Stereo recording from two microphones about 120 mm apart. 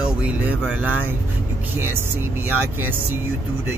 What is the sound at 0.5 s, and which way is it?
Speech, 15° right (ahead or behind).